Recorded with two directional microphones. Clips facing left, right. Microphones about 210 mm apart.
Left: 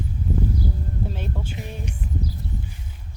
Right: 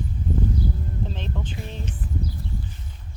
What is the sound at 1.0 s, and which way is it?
Speech, 10° left (ahead or behind).